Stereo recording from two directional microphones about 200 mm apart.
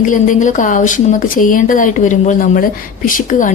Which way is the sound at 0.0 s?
40° left (ahead or behind).